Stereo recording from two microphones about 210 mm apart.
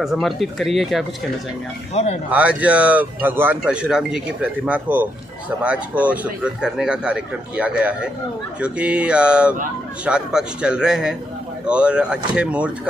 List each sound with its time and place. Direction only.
0.0 s a man's voice: centre (ahead or behind)
2.0 s speech: 30° left (ahead or behind)
2.3 s a man's voice: 5° right (ahead or behind)